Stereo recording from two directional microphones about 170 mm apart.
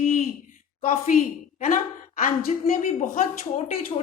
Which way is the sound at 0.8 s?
55° left (ahead or behind).